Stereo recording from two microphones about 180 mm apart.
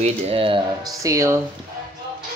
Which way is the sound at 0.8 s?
15° right (ahead or behind).